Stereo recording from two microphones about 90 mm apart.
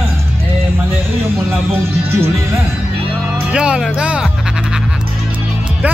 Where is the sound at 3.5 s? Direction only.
10° right (ahead or behind).